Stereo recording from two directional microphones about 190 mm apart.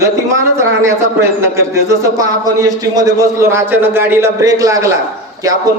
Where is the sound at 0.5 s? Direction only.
15° right (ahead or behind).